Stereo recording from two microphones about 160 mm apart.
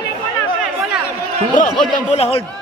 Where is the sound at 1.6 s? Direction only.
55° left (ahead or behind).